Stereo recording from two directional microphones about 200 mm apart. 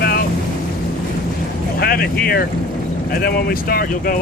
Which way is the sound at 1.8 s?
50° left (ahead or behind).